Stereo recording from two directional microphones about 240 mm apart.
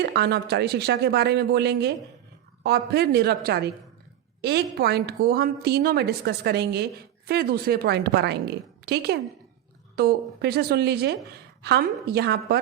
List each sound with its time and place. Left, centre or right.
0.0 s a woman's voice: right